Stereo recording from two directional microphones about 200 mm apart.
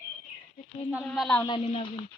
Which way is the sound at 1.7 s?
25° left (ahead or behind).